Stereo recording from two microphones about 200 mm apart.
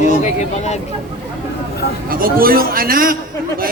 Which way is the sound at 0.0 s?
35° left (ahead or behind).